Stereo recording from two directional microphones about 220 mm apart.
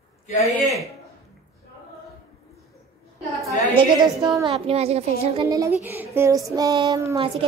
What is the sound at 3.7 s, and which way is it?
Speech, 15° right (ahead or behind).